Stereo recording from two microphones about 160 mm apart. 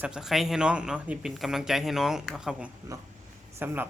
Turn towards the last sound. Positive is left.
turn(degrees=-10)  # may be behind; listen again after turning